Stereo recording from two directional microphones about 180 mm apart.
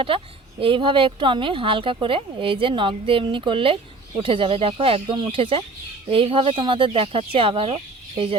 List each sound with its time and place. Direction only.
0.1 s speech: 30° right (ahead or behind)